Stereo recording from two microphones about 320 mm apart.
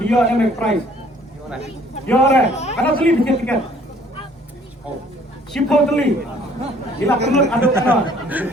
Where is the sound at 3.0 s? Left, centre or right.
Centre.